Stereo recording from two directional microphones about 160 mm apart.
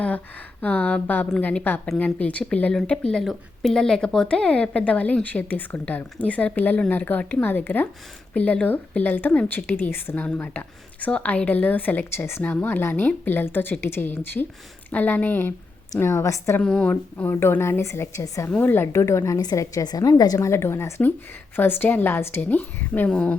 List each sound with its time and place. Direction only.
0.6 s a woman's voice: 10° left (ahead or behind)
16.6 s a woman's voice: 5° left (ahead or behind)